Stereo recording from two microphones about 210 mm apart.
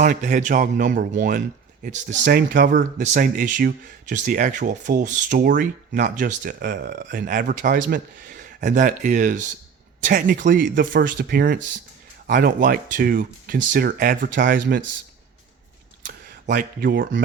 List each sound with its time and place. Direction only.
0.0 s speech: 35° right (ahead or behind)
16.0 s speech: 40° right (ahead or behind)